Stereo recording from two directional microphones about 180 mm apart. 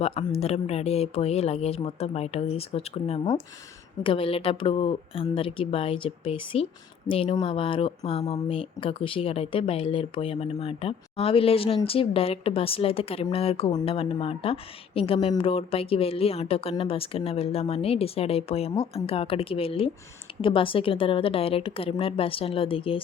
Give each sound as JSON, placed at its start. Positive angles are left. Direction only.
{"t": 0.0, "sound": "a woman's voice", "side_deg": 35}